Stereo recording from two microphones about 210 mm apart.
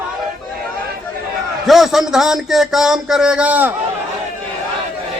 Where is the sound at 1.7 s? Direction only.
Centre (ahead or behind).